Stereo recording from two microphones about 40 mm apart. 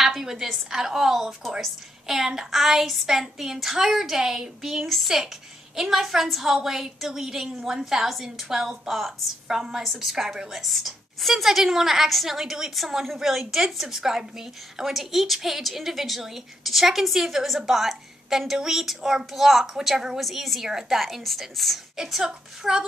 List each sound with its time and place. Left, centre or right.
0.0 s a woman's voice: centre
9.5 s a woman's voice: centre